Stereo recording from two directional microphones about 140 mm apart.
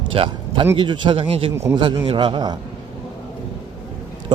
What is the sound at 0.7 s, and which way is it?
Speech, 35° right (ahead or behind).